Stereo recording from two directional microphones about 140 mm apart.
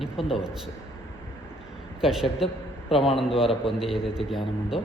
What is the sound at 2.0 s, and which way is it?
A man's voice, 5° right (ahead or behind).